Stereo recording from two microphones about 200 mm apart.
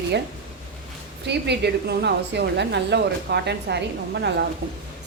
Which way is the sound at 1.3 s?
55° right (ahead or behind).